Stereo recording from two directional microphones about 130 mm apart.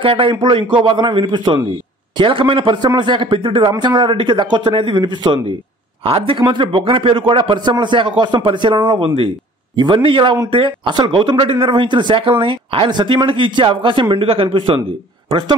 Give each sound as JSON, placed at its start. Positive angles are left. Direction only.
{"t": 0.0, "sound": "speech", "side_deg": -40}